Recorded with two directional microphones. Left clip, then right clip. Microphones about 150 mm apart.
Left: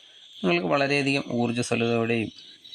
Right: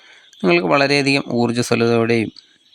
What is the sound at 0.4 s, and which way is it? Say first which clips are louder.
Speech: right 8 dB; 35° right (ahead or behind).